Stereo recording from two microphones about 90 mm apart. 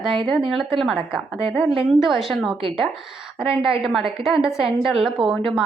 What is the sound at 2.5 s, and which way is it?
Speech, 80° right.